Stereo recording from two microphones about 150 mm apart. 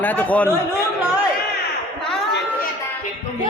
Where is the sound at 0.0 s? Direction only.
10° left (ahead or behind).